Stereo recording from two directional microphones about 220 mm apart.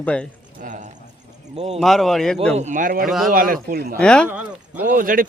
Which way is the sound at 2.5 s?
35° right (ahead or behind).